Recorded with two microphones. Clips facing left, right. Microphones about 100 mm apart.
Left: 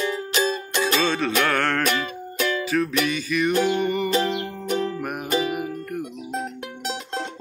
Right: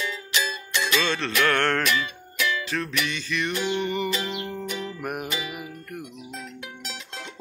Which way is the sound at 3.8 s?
Centre (ahead or behind).